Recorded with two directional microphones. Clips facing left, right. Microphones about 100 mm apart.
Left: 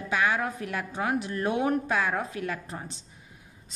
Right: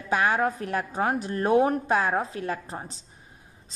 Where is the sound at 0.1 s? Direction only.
40° right (ahead or behind).